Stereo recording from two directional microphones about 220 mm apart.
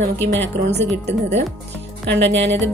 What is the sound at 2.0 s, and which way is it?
Speech, 50° right (ahead or behind).